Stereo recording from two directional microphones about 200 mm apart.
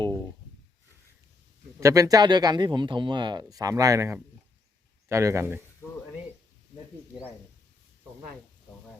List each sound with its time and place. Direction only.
1.8 s speech: 15° right (ahead or behind)